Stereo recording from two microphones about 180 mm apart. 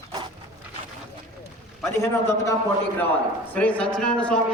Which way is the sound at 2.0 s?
15° left (ahead or behind).